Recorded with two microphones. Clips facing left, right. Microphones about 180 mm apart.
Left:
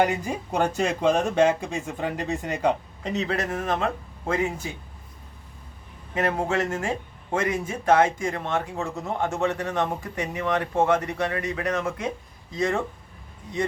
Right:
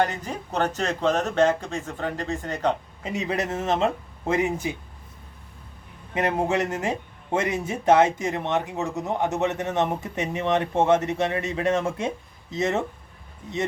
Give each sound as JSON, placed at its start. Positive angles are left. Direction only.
{"t": 0.0, "sound": "speech", "side_deg": 10}
{"t": 3.0, "sound": "speech", "side_deg": -10}
{"t": 6.1, "sound": "speech", "side_deg": -15}